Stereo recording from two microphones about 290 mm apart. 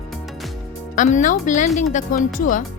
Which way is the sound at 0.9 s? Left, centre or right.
Left.